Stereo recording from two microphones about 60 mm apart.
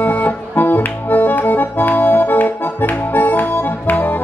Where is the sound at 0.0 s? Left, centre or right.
Left.